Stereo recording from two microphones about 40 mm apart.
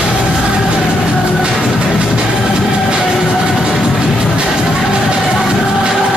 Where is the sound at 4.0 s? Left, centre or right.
Right.